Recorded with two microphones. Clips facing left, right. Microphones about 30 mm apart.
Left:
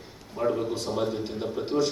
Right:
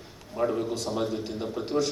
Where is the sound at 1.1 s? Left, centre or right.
Left.